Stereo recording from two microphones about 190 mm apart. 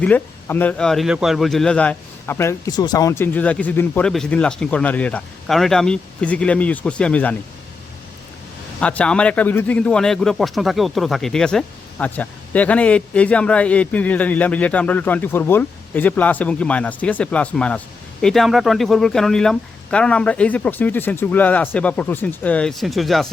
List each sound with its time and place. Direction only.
0.0 s a man's voice: 10° left (ahead or behind)
8.8 s a man's voice: 5° left (ahead or behind)